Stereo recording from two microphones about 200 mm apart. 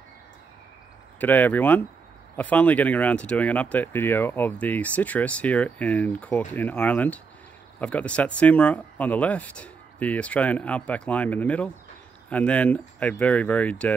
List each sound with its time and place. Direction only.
1.2 s speech: 10° left (ahead or behind)